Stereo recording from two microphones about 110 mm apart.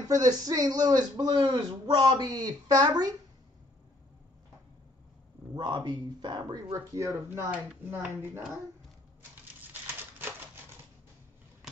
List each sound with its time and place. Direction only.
0.1 s a man's voice: 35° right (ahead or behind)
5.5 s a man's voice: 40° right (ahead or behind)
7.5 s speech: 15° right (ahead or behind)
9.7 s typewriter: 20° right (ahead or behind)
11.6 s vehicle: 5° right (ahead or behind)